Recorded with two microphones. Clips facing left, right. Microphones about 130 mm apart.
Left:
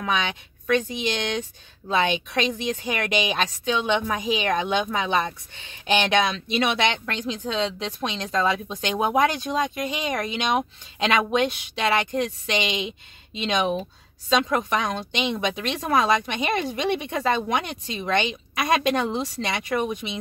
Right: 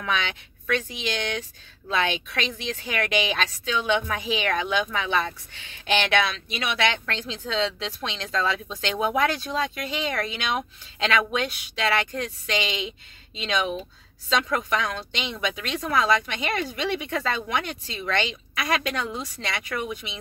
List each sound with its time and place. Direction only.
0.0 s a woman's voice: 15° left (ahead or behind)
14.7 s a woman's voice: 20° left (ahead or behind)